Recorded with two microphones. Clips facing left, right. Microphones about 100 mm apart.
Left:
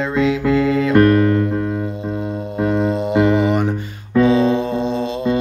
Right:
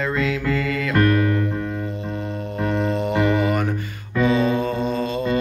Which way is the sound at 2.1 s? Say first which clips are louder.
Left 5 dB; 10° left (ahead or behind).